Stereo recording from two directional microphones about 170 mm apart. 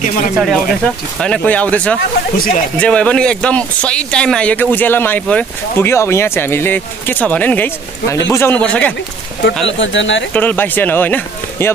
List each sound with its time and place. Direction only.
0.4 s speech: centre (ahead or behind)
2.3 s speech: 60° left (ahead or behind)
2.8 s speech: 5° left (ahead or behind)
9.7 s speech: 90° left
10.3 s speech: 10° left (ahead or behind)